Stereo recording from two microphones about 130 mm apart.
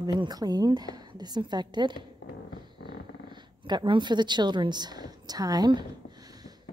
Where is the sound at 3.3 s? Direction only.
35° right (ahead or behind).